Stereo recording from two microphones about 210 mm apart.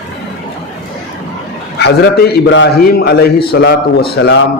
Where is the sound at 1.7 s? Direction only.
50° left (ahead or behind).